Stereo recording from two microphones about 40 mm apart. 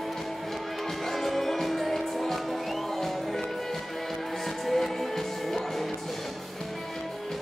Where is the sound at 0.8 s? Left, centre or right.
Centre.